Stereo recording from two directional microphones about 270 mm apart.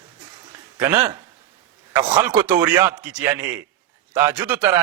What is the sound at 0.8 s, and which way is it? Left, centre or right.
A man's voice, centre.